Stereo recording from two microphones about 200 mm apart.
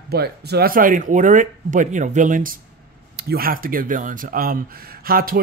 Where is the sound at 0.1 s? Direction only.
55° right (ahead or behind).